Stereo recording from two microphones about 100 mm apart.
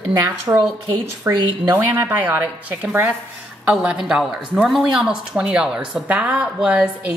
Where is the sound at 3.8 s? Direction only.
5° right (ahead or behind).